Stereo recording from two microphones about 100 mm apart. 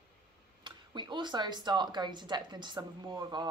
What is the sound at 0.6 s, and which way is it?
Speech, 50° right (ahead or behind).